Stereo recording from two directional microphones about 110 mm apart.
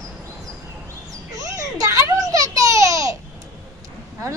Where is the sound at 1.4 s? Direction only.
30° right (ahead or behind).